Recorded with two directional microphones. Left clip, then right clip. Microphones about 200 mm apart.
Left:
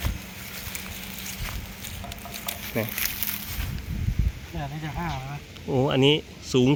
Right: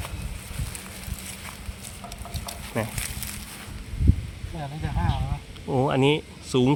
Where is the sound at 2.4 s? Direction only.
5° right (ahead or behind).